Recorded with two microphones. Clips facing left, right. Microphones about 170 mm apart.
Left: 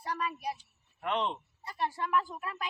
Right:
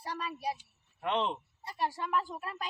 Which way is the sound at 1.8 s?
30° right (ahead or behind).